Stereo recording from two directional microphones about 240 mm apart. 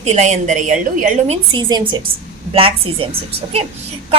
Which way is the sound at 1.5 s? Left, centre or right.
Centre.